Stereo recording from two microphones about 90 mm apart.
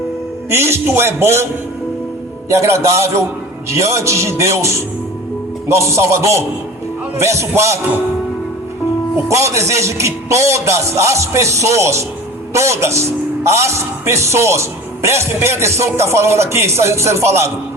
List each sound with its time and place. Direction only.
0.5 s speech: 30° right (ahead or behind)
2.5 s speech: 30° right (ahead or behind)
9.3 s speech: 35° right (ahead or behind)